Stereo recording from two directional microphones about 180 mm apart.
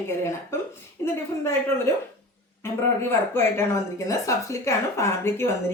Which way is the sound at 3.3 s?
15° left (ahead or behind).